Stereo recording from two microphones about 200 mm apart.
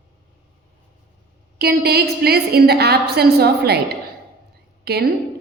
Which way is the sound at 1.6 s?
50° right (ahead or behind).